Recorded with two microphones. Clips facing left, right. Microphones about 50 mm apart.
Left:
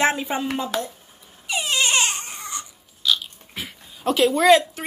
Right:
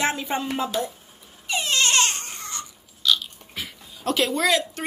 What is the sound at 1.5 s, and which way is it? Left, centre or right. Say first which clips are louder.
Dog: left 1 dB; centre.